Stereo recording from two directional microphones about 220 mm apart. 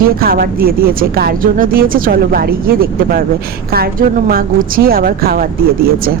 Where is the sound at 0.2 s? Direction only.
40° right (ahead or behind).